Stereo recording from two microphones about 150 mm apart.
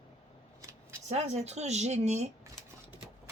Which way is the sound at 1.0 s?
50° right (ahead or behind).